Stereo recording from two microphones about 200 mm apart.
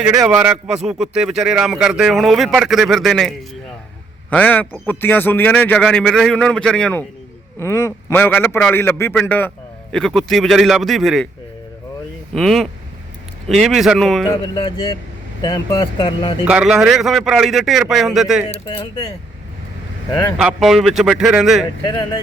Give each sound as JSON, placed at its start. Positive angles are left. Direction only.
{"t": 0.0, "sound": "a man's voice", "side_deg": -10}
{"t": 12.3, "sound": "speech", "side_deg": 0}
{"t": 14.4, "sound": "speech", "side_deg": 25}
{"t": 16.4, "sound": "speech", "side_deg": -5}
{"t": 18.4, "sound": "speech", "side_deg": 25}
{"t": 20.1, "sound": "a man's voice", "side_deg": 15}
{"t": 20.3, "sound": "speech", "side_deg": -5}
{"t": 21.8, "sound": "speech", "side_deg": 20}